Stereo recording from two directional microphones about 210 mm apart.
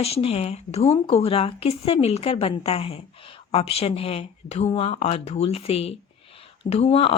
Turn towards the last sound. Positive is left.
turn(degrees=25)  # may be behind; listen again after turning